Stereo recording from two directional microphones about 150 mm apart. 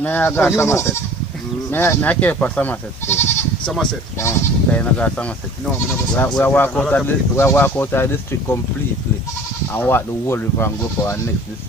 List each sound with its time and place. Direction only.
0.0 s speech: 10° left (ahead or behind)
3.6 s speech: 5° left (ahead or behind)
4.2 s speech: 15° left (ahead or behind)
6.1 s speech: 10° left (ahead or behind)
9.8 s speech: 15° left (ahead or behind)